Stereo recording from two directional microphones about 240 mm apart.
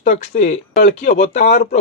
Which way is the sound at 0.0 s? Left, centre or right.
Left.